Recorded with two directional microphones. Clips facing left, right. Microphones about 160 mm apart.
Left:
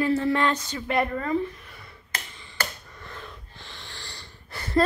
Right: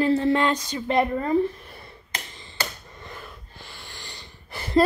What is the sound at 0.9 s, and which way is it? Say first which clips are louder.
Speech: right 3 dB; 25° right (ahead or behind).